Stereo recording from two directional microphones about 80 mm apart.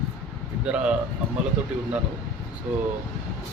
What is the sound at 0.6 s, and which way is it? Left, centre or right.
Speech, centre.